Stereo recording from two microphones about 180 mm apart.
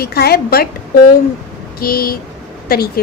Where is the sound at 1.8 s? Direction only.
55° left (ahead or behind).